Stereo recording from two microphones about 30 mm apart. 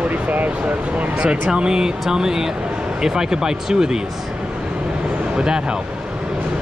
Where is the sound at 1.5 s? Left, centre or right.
Right.